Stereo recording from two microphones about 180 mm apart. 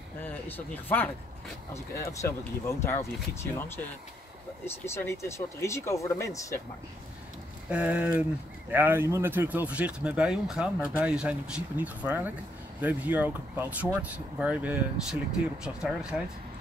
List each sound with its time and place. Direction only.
0.2 s speech: 10° left (ahead or behind)
7.7 s speech: 5° right (ahead or behind)